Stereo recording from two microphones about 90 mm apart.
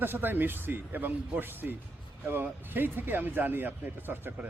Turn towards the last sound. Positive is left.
turn(degrees=-20)  # may be behind; listen again after turning